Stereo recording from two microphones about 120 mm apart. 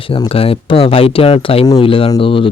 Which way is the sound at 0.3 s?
55° left (ahead or behind).